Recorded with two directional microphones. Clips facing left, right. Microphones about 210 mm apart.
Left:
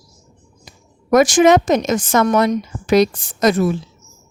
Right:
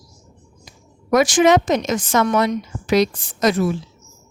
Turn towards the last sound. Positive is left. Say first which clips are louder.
# left 3 dB
turn(degrees=50)  # may be behind; listen again after turning